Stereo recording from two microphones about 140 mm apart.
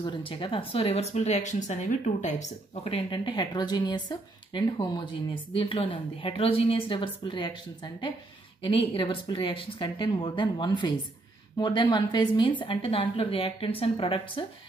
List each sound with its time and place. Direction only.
0.0 s speech: 35° left (ahead or behind)